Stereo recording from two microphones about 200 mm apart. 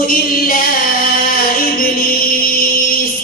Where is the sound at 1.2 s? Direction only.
45° left (ahead or behind).